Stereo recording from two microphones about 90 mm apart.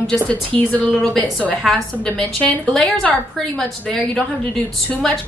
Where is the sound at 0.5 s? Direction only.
85° right.